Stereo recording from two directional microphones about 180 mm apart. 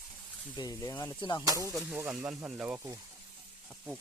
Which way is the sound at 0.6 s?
20° left (ahead or behind).